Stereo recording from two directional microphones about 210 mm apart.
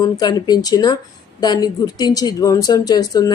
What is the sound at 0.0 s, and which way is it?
A woman's voice, 20° left (ahead or behind).